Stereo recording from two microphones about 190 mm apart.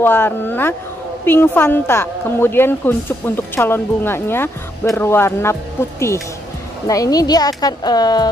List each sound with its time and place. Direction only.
0.0 s a woman's voice: 10° left (ahead or behind)